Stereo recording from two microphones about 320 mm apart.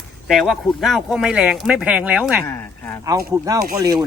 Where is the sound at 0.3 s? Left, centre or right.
Centre.